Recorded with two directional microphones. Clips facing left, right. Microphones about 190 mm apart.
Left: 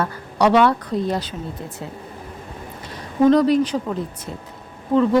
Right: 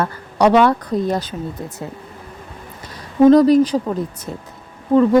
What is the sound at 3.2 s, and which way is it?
Speech, 40° right (ahead or behind).